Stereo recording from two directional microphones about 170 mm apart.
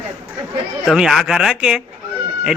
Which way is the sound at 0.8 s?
Centre (ahead or behind).